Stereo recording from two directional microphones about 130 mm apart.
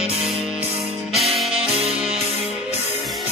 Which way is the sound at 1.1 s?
Centre (ahead or behind).